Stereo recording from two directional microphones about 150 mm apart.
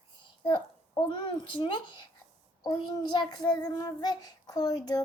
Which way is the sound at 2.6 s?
30° left (ahead or behind).